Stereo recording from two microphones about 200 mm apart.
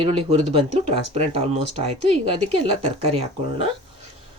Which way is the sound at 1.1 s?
30° right (ahead or behind).